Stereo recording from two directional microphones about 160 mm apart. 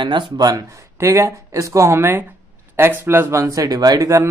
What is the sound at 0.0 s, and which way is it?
Speech, 30° right (ahead or behind).